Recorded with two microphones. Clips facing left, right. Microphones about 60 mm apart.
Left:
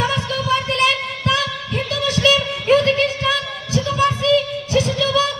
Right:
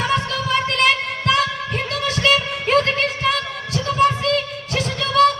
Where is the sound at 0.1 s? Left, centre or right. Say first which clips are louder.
Even; right.